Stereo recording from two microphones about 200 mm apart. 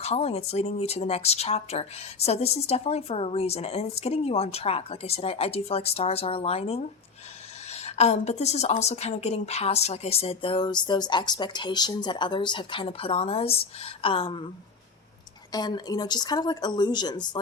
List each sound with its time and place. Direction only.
0.0 s a woman's voice: 30° left (ahead or behind)
15.5 s a woman's voice: 20° left (ahead or behind)